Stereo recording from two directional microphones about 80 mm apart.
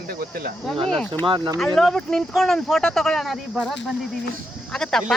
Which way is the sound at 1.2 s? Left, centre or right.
Right.